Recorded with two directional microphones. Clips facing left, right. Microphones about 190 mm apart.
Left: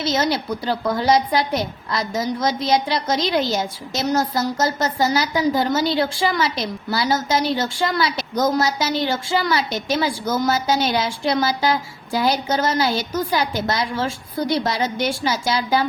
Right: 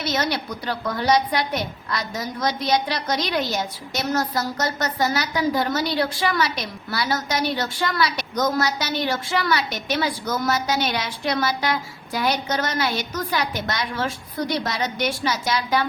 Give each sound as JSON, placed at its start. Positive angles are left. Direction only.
{"t": 0.0, "sound": "a woman's voice", "side_deg": 25}